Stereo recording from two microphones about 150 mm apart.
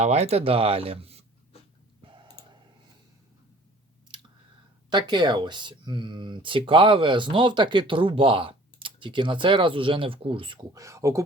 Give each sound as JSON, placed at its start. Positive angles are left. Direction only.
{"t": 0.0, "sound": "speech", "side_deg": -45}
{"t": 2.2, "sound": "clicking", "side_deg": -25}
{"t": 4.9, "sound": "speech", "side_deg": -30}